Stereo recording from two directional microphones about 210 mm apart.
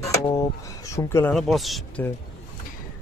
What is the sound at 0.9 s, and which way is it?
Speech, 15° left (ahead or behind).